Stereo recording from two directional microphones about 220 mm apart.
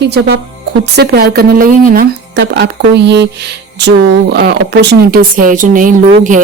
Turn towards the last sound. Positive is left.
turn(degrees=-35)  # may be behind; listen again after turning